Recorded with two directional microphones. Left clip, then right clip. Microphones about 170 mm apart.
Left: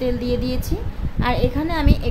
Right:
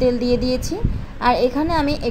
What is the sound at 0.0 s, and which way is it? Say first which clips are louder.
A woman's voice: right 5 dB; 20° right (ahead or behind).